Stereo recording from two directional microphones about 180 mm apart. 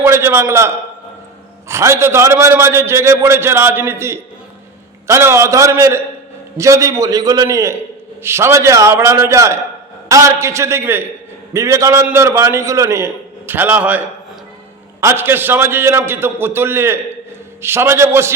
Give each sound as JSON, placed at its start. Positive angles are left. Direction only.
{"t": 0.0, "sound": "a man's voice", "side_deg": -15}
{"t": 15.0, "sound": "a man's voice", "side_deg": -10}